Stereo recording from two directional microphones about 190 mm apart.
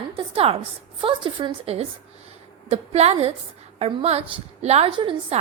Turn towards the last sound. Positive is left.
turn(degrees=-30)  # may be behind; listen again after turning